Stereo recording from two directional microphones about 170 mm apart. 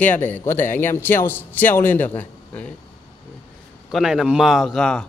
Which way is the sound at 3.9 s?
5° right (ahead or behind).